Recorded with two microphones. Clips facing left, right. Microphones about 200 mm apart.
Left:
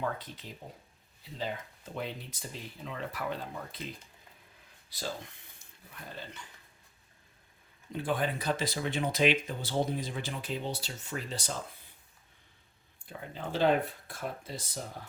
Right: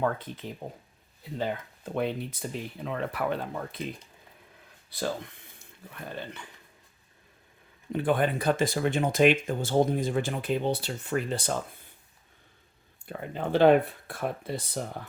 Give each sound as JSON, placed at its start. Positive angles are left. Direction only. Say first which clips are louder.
{"t": 0.0, "sound": "speech", "louder": "right 7 dB", "side_deg": -55}
{"t": 4.9, "sound": "speech", "louder": "right 7 dB", "side_deg": -60}
{"t": 7.9, "sound": "speech", "louder": "right 6 dB", "side_deg": -60}
{"t": 13.1, "sound": "speech", "louder": "right 8 dB", "side_deg": -60}